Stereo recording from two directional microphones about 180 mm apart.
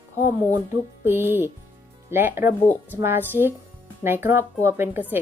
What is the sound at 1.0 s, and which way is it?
A woman's voice, 10° right (ahead or behind).